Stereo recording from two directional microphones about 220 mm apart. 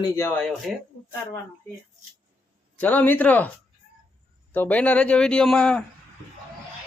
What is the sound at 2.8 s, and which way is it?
Speech, 10° left (ahead or behind).